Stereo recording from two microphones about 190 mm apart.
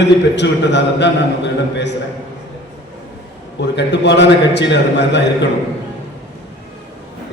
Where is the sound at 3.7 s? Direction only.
65° left (ahead or behind).